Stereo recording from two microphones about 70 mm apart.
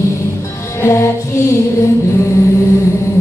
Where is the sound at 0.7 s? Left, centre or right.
Left.